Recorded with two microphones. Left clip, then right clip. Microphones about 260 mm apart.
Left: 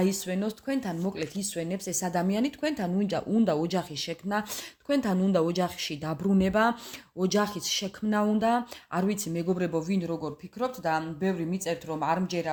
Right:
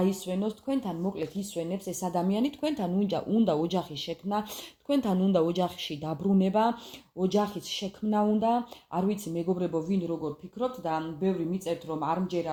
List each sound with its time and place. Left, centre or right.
0.0 s speech: left